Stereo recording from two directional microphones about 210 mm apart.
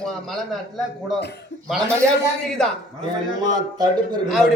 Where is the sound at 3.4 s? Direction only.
20° right (ahead or behind).